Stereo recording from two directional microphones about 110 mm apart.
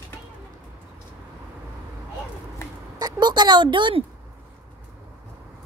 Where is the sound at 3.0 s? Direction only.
40° right (ahead or behind).